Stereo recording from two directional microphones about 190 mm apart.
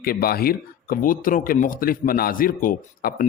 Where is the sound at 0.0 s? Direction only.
50° left (ahead or behind).